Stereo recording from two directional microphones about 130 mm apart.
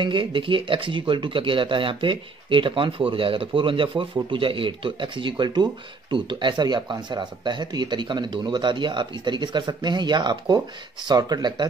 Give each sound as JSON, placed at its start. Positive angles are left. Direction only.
{"t": 0.0, "sound": "speech", "side_deg": -40}